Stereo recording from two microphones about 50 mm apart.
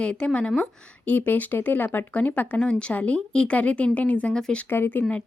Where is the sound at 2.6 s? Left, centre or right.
Centre.